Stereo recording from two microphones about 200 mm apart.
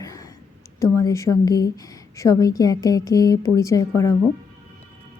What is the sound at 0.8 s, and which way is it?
A woman's voice, 15° left (ahead or behind).